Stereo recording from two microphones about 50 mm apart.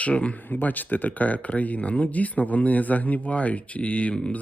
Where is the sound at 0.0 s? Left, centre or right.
Left.